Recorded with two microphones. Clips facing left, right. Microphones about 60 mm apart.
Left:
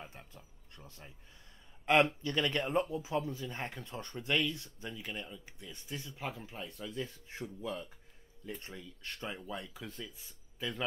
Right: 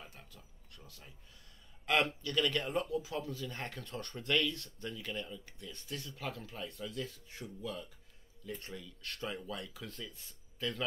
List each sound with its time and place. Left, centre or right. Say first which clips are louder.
0.0 s a sound: left 4 dB; left
1.9 s speech: left 4 dB; left
9.8 s speech: left 1 dB; centre